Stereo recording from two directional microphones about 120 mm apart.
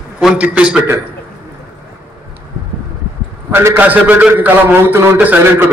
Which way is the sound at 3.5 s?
15° right (ahead or behind).